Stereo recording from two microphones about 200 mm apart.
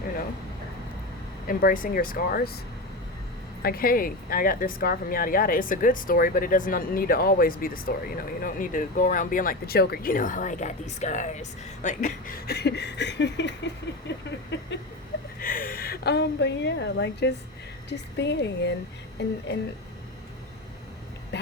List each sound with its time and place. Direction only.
1.5 s speech: 45° left (ahead or behind)
3.6 s a woman's voice: 50° left (ahead or behind)
15.4 s a woman's voice: 45° left (ahead or behind)